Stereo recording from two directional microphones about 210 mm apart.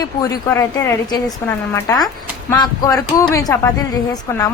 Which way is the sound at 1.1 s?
20° left (ahead or behind).